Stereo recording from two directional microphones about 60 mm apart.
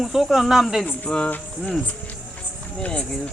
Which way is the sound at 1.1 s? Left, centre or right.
Centre.